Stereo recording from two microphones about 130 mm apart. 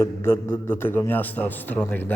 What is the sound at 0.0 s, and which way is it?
Mantra, 20° left (ahead or behind).